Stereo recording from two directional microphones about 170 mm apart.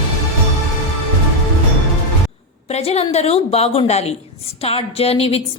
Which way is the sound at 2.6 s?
40° left (ahead or behind).